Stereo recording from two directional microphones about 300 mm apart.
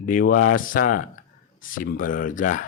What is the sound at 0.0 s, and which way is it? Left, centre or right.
Speech, left.